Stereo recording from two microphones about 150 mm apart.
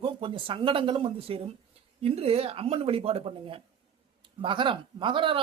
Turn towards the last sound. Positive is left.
turn(degrees=-35)  # may be behind; listen again after turning